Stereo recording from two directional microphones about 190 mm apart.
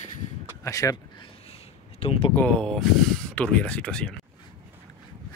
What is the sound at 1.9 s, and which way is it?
Speech, 30° left (ahead or behind).